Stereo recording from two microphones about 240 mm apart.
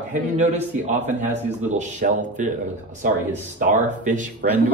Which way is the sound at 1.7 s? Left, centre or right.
Right.